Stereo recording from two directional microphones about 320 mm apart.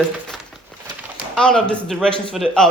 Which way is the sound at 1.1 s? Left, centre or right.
Centre.